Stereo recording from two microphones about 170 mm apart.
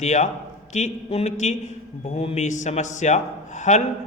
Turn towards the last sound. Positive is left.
turn(degrees=45)  # may be behind; listen again after turning